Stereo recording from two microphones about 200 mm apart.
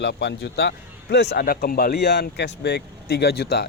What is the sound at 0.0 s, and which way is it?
Speech, 60° left (ahead or behind).